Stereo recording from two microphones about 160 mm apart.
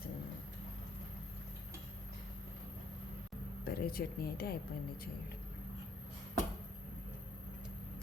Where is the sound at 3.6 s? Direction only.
70° left (ahead or behind).